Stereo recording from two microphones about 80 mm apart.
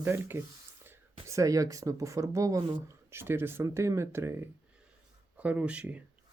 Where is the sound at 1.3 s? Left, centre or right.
Right.